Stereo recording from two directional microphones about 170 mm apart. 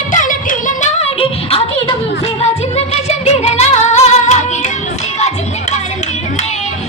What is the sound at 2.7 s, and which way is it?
Music, 35° left (ahead or behind).